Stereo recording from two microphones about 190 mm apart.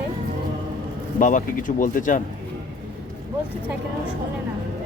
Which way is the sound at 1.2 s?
45° left (ahead or behind).